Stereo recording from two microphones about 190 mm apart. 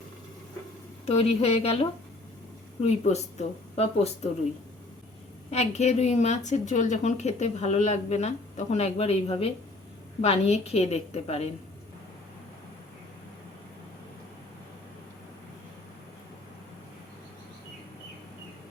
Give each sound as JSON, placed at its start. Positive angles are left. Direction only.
{"t": 1.0, "sound": "a woman's voice", "side_deg": 30}
{"t": 5.5, "sound": "a woman's voice", "side_deg": 35}